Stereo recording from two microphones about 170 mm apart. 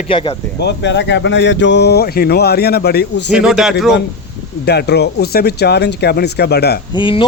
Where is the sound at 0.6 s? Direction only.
85° left.